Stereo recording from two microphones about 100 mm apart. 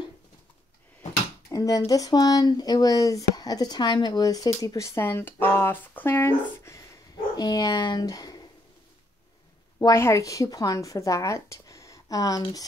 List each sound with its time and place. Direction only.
1.5 s speech: 35° left (ahead or behind)
7.3 s speech: 40° left (ahead or behind)
9.8 s a woman's voice: 30° left (ahead or behind)